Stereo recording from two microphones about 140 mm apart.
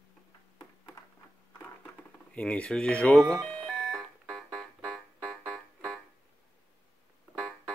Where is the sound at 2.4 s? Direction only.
10° left (ahead or behind).